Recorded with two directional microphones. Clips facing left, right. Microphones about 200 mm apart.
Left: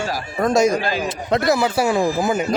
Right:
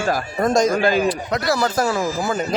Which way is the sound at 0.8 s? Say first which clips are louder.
Right 5 dB; 50° right (ahead or behind).